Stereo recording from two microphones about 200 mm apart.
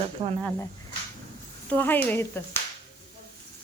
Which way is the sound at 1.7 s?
10° left (ahead or behind).